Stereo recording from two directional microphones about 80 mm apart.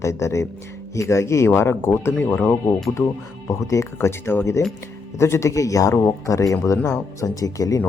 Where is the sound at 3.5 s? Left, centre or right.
Left.